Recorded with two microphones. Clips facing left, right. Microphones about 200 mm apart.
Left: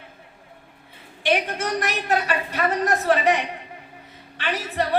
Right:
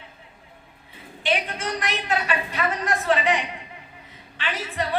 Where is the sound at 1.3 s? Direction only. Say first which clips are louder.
Left 3 dB; 45° left (ahead or behind).